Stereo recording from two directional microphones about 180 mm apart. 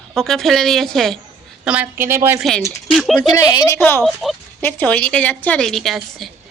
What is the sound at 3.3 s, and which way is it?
Speech, 20° left (ahead or behind).